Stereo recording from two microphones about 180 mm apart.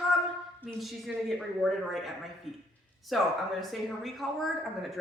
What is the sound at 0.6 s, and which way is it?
Speech, centre (ahead or behind).